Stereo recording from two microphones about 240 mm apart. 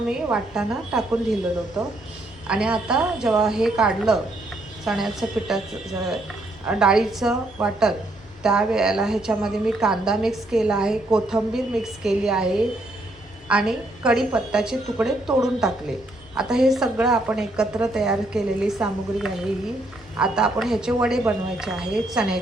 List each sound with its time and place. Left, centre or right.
0.1 s a woman's voice: centre
2.5 s a woman's voice: centre
6.7 s a woman's voice: centre